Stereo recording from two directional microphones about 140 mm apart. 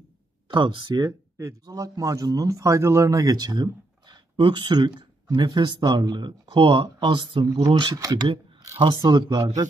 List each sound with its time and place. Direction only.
0.5 s speech: 35° right (ahead or behind)